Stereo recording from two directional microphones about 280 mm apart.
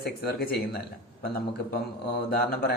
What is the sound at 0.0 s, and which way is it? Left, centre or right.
Speech, left.